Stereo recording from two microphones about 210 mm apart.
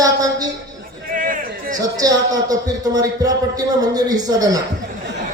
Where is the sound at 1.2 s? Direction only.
40° right (ahead or behind).